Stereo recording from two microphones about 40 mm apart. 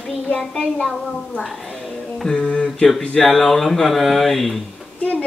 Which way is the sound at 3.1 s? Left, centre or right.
Centre.